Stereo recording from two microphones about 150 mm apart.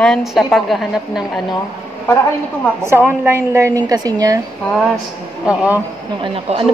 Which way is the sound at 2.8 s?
15° right (ahead or behind).